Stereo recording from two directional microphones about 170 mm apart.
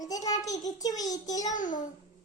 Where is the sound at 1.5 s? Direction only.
50° left (ahead or behind).